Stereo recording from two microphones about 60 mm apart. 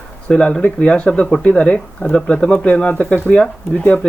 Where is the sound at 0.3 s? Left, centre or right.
Centre.